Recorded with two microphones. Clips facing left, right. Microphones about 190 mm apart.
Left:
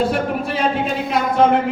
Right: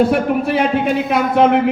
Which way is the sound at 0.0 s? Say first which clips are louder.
Right 5 dB; 60° right (ahead or behind).